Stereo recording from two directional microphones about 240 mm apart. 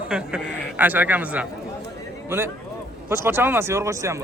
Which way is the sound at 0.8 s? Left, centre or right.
Centre.